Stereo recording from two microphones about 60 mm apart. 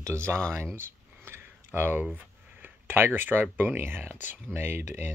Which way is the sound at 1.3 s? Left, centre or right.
Right.